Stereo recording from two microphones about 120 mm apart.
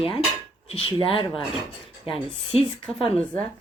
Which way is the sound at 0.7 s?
50° left (ahead or behind).